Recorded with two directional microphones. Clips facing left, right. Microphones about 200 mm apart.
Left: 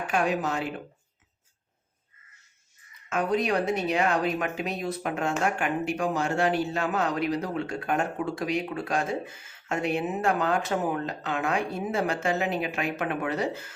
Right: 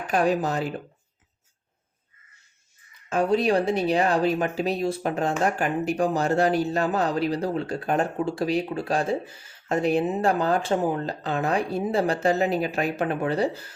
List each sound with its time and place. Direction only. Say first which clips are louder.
0.0 s a man's voice: right 4 dB; 35° right (ahead or behind)
3.1 s a man's voice: right 4 dB; 30° right (ahead or behind)